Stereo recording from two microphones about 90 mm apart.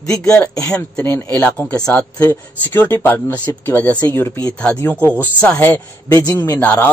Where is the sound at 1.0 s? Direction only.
20° left (ahead or behind).